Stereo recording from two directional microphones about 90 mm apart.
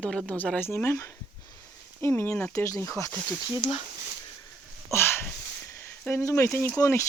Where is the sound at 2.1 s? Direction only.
25° left (ahead or behind).